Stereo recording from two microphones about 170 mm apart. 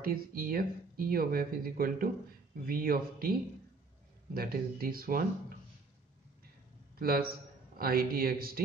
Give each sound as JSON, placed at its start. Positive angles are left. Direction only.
{"t": 0.0, "sound": "speech", "side_deg": -60}
{"t": 7.0, "sound": "a man's voice", "side_deg": -60}